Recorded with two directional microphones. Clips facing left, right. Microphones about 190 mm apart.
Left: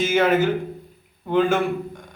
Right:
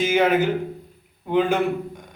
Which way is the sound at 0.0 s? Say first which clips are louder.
Even; 15° right (ahead or behind).